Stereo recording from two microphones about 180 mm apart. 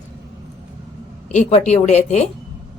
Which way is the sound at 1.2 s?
40° left (ahead or behind).